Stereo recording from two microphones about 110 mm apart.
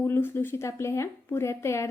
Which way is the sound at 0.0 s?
20° left (ahead or behind).